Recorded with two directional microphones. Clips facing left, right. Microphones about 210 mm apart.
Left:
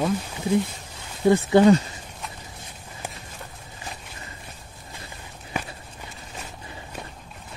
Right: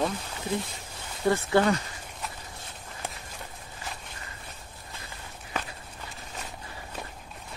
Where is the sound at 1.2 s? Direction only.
20° left (ahead or behind).